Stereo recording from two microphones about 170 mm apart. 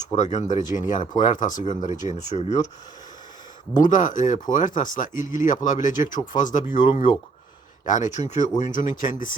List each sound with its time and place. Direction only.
0.1 s speech: 45° left (ahead or behind)
3.8 s speech: 50° left (ahead or behind)